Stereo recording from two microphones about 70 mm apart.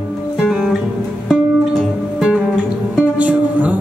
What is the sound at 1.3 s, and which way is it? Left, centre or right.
Music, centre.